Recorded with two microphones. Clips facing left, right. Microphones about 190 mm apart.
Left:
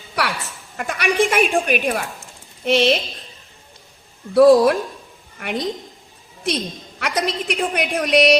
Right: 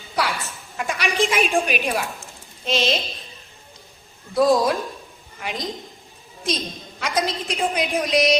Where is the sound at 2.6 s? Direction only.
65° left (ahead or behind).